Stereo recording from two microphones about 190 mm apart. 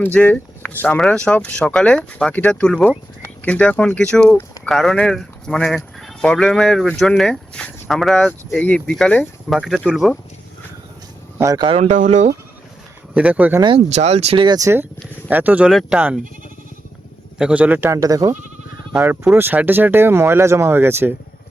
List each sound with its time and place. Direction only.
0.0 s speech: 10° left (ahead or behind)
11.3 s speech: 20° right (ahead or behind); by 12.3 s 40° right (ahead or behind)
13.1 s speech: 5° right (ahead or behind)
13.6 s speech: 30° right (ahead or behind); by 16.2 s 5° right (ahead or behind)
17.3 s speech: 5° right (ahead or behind)